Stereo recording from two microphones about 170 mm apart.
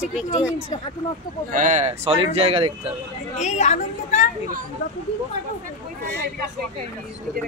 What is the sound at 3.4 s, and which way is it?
Speech, 45° left (ahead or behind).